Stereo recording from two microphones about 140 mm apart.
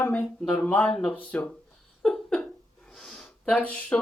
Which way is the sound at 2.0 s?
5° left (ahead or behind).